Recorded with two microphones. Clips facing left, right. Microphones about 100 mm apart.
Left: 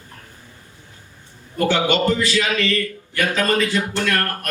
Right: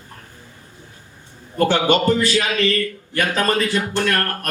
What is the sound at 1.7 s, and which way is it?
A man's voice, 50° right (ahead or behind).